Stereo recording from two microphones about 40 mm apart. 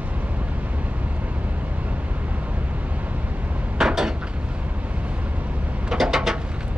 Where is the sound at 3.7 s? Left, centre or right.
Centre.